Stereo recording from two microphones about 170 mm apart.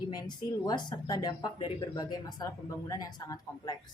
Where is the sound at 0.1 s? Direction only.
25° left (ahead or behind).